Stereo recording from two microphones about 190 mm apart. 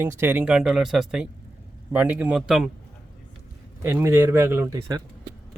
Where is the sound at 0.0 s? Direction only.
10° right (ahead or behind).